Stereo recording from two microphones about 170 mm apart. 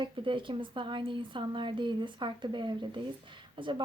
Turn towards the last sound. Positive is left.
turn(degrees=-30)  # may be behind; listen again after turning